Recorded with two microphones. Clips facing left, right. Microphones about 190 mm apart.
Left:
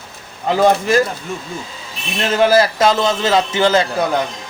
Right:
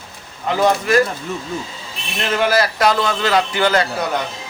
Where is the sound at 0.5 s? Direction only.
30° left (ahead or behind).